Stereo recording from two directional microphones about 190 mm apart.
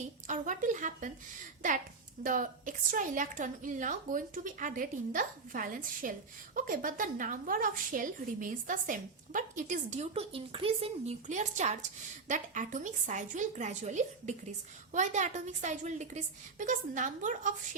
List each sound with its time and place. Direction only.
0.3 s a woman's voice: 40° right (ahead or behind)
2.2 s a woman's voice: 45° right (ahead or behind)